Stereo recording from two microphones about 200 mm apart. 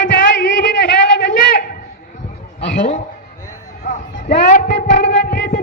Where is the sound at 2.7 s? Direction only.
40° left (ahead or behind).